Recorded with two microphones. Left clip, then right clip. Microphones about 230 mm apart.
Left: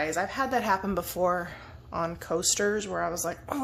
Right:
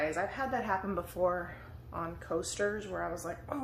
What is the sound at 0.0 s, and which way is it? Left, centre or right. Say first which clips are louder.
A woman's voice: left 5 dB; left.